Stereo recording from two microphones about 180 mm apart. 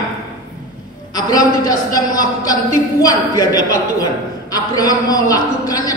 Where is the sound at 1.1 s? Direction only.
20° left (ahead or behind).